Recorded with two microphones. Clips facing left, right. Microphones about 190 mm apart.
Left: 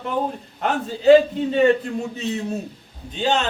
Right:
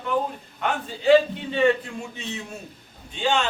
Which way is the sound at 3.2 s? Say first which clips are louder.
Left 2 dB; 40° left (ahead or behind).